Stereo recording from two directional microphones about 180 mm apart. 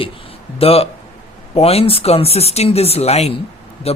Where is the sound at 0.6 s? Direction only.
35° left (ahead or behind).